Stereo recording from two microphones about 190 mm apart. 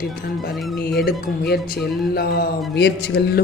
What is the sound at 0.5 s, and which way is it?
Speech, centre (ahead or behind).